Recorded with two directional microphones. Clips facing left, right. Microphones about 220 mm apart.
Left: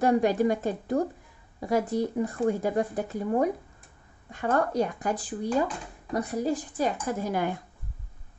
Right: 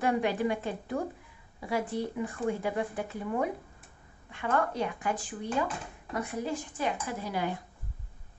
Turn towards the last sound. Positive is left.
turn(degrees=45)  # may be behind; listen again after turning